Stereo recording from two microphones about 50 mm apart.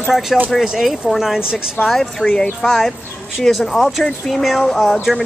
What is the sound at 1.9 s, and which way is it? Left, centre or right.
Speech, centre.